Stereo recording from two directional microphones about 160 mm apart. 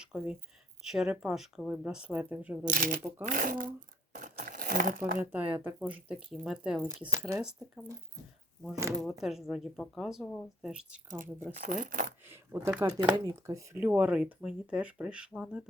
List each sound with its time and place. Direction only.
0.0 s speech: 5° right (ahead or behind)
2.6 s speech: 60° right (ahead or behind)
3.2 s crumpling: 55° right (ahead or behind)
4.9 s speech: 10° right (ahead or behind)
8.7 s speech: 20° right (ahead or behind)
9.2 s speech: centre (ahead or behind)
11.5 s speech: 55° right (ahead or behind)
12.3 s speech: 15° right (ahead or behind)
13.0 s speech: 30° right (ahead or behind)
13.3 s speech: 20° right (ahead or behind)